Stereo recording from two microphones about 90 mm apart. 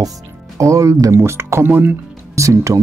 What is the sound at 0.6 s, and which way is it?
Speech, 35° right (ahead or behind).